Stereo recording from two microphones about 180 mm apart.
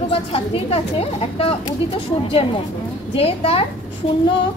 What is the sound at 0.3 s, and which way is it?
A woman's voice, 35° left (ahead or behind).